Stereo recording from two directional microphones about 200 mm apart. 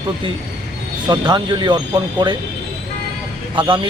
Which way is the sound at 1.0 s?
20° right (ahead or behind).